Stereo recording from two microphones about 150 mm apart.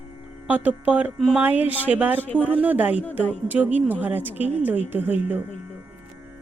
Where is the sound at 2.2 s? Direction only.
10° left (ahead or behind).